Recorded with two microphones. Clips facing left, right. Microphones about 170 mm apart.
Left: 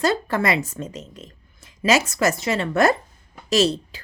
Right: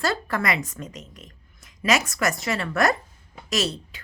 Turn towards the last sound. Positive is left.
turn(degrees=30)  # may be behind; listen again after turning